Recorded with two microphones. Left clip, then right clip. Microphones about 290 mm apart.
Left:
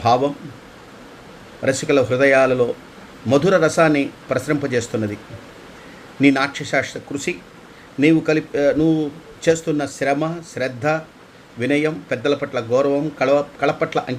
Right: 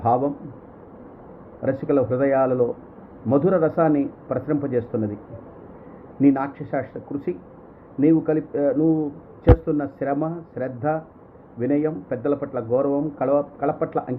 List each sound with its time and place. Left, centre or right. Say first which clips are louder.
1.6 s speech: left 4 dB; left
6.1 s speech: left 4 dB; left
8.0 s speech: left 3 dB; left